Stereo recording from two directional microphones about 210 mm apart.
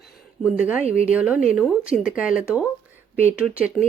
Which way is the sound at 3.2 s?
5° right (ahead or behind).